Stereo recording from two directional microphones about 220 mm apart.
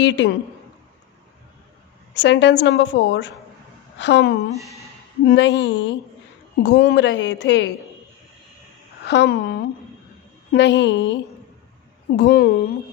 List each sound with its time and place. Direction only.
0.0 s a woman's voice: 55° left (ahead or behind)
2.1 s a woman's voice: 50° left (ahead or behind)
4.5 s speech: centre (ahead or behind)
5.3 s a woman's voice: 55° left (ahead or behind)
9.0 s a woman's voice: 50° left (ahead or behind)